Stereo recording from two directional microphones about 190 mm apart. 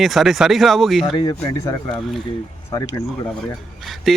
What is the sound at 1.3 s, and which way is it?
Speech, 20° left (ahead or behind).